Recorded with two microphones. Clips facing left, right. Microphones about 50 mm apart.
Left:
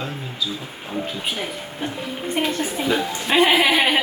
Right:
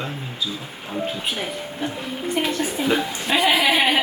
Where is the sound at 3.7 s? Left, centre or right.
Centre.